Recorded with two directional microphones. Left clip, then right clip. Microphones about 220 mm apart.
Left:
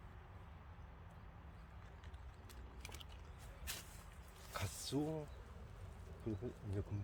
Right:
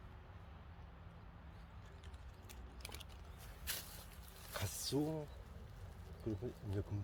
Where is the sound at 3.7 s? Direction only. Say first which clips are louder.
Right 4 dB; 35° right (ahead or behind).